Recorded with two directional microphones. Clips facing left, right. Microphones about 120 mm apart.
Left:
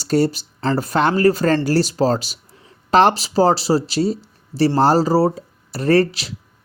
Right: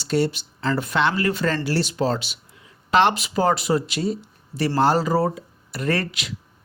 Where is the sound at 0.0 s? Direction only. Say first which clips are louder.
Left 4 dB; 40° left (ahead or behind).